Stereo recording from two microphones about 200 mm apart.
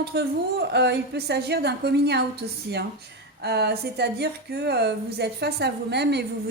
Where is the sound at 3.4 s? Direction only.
55° right (ahead or behind).